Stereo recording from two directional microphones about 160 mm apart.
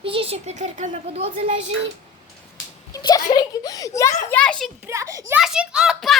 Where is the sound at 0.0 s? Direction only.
35° right (ahead or behind).